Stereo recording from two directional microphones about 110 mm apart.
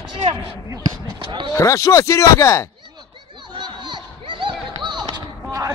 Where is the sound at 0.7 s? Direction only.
40° right (ahead or behind).